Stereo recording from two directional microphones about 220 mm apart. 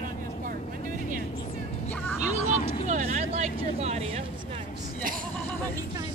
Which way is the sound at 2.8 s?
30° right (ahead or behind).